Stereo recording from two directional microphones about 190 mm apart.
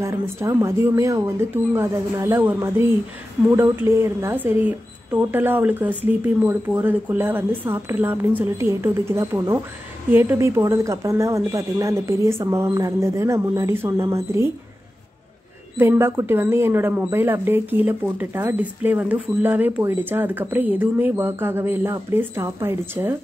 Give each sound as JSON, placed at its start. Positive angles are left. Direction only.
{"t": 0.0, "sound": "speech", "side_deg": -15}
{"t": 15.8, "sound": "speech", "side_deg": -10}